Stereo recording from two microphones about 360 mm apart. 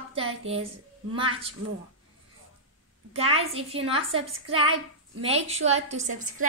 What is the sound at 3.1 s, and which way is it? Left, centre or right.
Speech, centre.